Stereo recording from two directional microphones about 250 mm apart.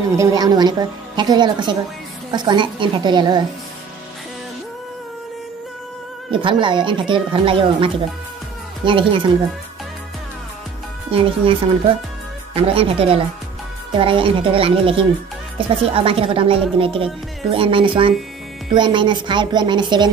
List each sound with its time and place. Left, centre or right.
0.1 s a woman's voice: centre
6.3 s speech: centre
11.1 s a woman's voice: right